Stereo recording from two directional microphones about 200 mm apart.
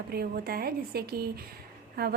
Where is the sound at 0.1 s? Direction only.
50° right (ahead or behind).